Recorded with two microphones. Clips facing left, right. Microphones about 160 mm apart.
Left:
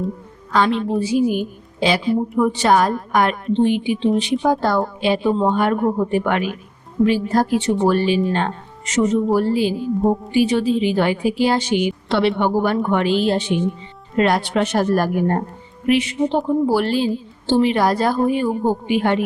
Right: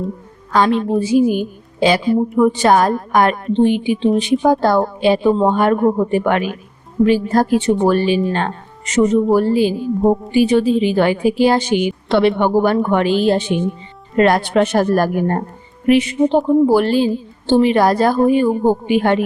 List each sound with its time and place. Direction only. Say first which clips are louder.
0.5 s a woman's voice: right 3 dB; 40° right (ahead or behind)